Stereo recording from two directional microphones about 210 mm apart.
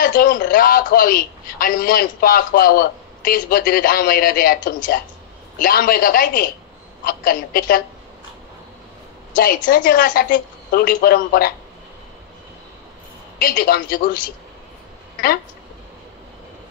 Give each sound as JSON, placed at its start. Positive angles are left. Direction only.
{"t": 0.0, "sound": "a man's voice", "side_deg": 40}
{"t": 9.3, "sound": "a man's voice", "side_deg": 40}
{"t": 13.4, "sound": "a woman's voice", "side_deg": 40}